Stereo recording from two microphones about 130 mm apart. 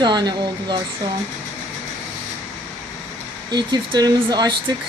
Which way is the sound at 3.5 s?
35° right (ahead or behind).